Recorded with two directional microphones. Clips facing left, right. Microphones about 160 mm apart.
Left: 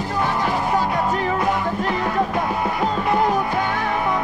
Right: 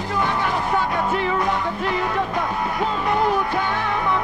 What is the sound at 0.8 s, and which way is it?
Music, 40° left (ahead or behind).